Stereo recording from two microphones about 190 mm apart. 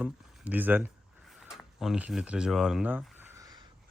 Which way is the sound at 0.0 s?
10° right (ahead or behind).